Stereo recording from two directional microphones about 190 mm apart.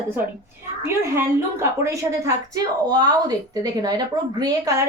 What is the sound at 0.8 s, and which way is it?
Speech, 15° right (ahead or behind).